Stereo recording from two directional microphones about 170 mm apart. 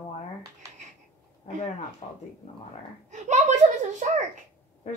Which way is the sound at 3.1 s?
45° right (ahead or behind).